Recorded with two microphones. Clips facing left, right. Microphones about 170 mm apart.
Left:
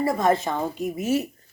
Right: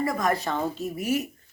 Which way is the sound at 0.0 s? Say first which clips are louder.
Left 4 dB; 30° left (ahead or behind).